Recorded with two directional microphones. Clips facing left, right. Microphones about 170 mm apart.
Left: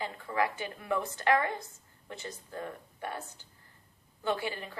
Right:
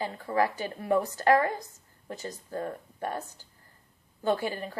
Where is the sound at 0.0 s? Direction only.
40° right (ahead or behind).